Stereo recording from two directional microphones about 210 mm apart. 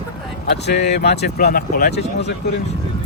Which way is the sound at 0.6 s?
50° left (ahead or behind).